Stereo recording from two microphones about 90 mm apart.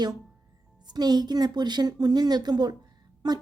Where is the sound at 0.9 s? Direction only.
50° right (ahead or behind).